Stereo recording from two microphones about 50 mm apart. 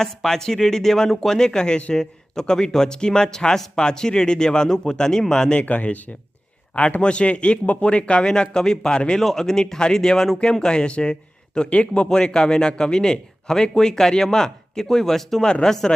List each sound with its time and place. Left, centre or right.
0.0 s a man's voice: centre
5.5 s a man's voice: left; by 15.9 s centre